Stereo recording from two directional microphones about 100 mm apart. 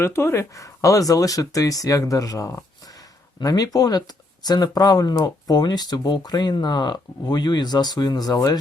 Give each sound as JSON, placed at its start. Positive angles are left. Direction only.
{"t": 0.0, "sound": "speech", "side_deg": 25}